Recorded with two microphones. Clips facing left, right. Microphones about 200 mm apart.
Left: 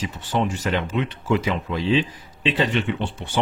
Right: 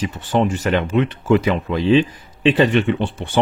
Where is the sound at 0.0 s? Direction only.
55° right (ahead or behind).